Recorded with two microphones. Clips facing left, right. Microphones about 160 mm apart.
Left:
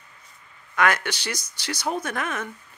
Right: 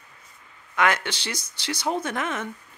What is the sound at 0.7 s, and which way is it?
Speech, 25° right (ahead or behind).